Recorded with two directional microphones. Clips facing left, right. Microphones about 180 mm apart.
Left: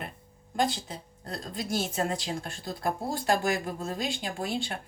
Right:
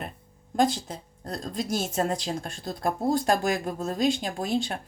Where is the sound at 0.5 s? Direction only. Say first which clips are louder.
Right 5 dB; 45° right (ahead or behind).